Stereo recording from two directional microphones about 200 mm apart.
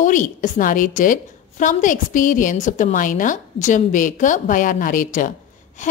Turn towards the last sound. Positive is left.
turn(degrees=40)  # may be behind; listen again after turning